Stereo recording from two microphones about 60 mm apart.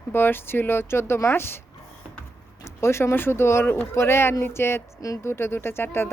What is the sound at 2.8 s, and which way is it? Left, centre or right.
Speech, left.